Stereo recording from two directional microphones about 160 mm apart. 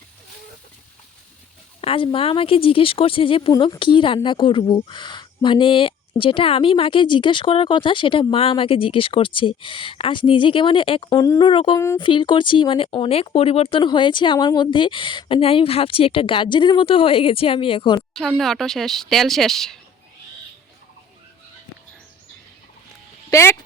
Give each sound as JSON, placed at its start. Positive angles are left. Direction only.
{"t": 1.8, "sound": "a woman's voice", "side_deg": 35}
{"t": 11.1, "sound": "a woman's voice", "side_deg": 20}
{"t": 18.1, "sound": "speech", "side_deg": 0}
{"t": 23.3, "sound": "speech", "side_deg": 15}